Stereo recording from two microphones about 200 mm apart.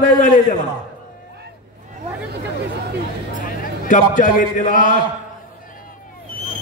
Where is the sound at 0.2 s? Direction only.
40° left (ahead or behind).